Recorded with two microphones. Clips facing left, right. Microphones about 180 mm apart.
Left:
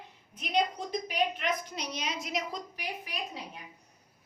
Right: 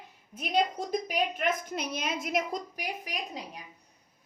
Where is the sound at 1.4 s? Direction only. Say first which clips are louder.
Right 3 dB; 50° right (ahead or behind).